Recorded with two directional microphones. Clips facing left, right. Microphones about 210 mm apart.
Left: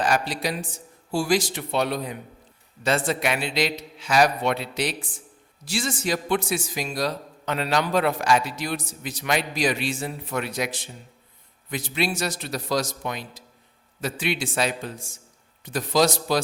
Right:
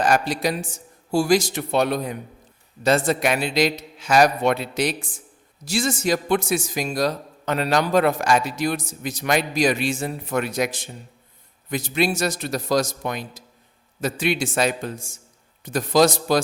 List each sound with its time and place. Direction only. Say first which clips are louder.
0.0 s a man's voice: right 4 dB; 45° right (ahead or behind)